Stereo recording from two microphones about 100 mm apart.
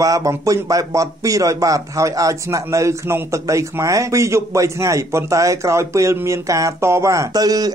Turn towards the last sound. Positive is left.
turn(degrees=-40)  # may be behind; listen again after turning